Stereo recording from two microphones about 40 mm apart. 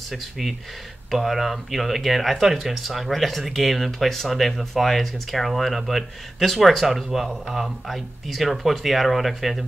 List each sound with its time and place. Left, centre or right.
0.1 s speech: centre